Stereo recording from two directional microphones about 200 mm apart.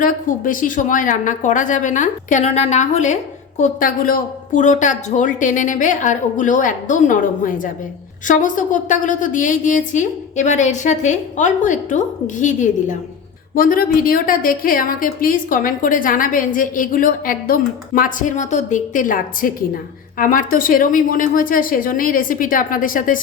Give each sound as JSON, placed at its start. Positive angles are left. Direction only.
{"t": 0.0, "sound": "a woman's voice", "side_deg": 40}